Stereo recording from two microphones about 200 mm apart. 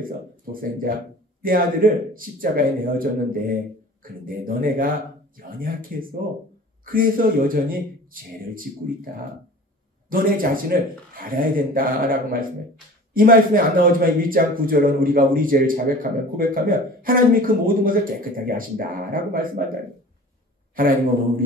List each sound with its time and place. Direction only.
0.0 s speech: 45° right (ahead or behind)
10.0 s speech: 45° right (ahead or behind)